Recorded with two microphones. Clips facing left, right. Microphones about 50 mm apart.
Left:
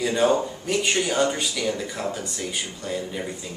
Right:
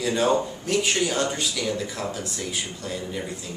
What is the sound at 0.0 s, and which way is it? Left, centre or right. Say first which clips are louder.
Speech: left 1 dB; centre.